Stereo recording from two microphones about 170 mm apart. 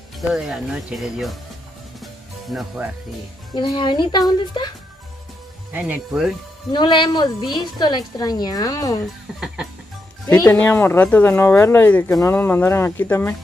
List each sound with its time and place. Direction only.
0.3 s speech: centre (ahead or behind)
2.0 s music: centre (ahead or behind)
3.5 s speech: 30° left (ahead or behind)
5.7 s speech: 10° right (ahead or behind)
6.7 s speech: 25° left (ahead or behind)
10.2 s speech: 20° left (ahead or behind)
10.6 s speech: 10° left (ahead or behind)